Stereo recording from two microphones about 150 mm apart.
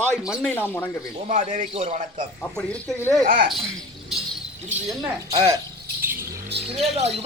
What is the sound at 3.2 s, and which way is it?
Speech, 75° right (ahead or behind).